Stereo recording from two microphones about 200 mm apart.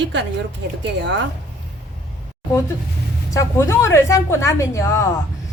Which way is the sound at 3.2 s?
15° left (ahead or behind).